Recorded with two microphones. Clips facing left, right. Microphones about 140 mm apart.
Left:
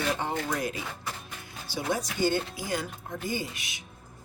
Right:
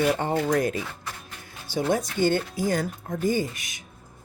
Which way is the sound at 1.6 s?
50° right (ahead or behind).